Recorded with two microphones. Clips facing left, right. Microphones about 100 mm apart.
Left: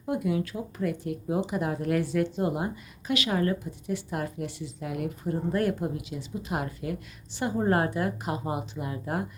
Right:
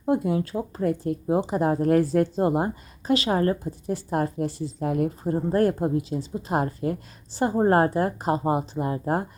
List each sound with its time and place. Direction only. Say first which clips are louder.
0.0 s speech: right 5 dB; 35° right (ahead or behind)